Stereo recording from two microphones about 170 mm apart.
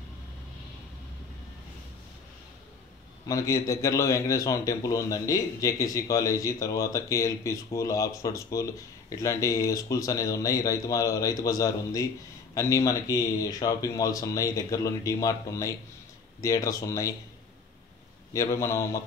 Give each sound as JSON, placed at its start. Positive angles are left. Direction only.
{"t": 3.3, "sound": "a man's voice", "side_deg": 20}
{"t": 18.3, "sound": "a man's voice", "side_deg": 20}